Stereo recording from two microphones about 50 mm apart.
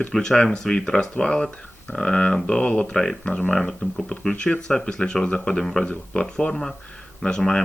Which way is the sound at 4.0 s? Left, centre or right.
Centre.